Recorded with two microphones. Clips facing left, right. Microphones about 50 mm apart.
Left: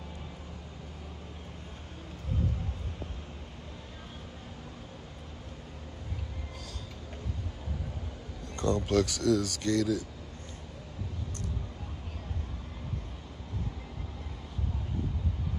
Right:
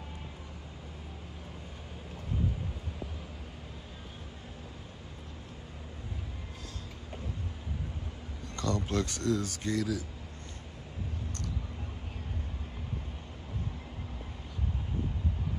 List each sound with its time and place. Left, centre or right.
8.5 s a sound: left
8.9 s speech: right
9.7 s speech: left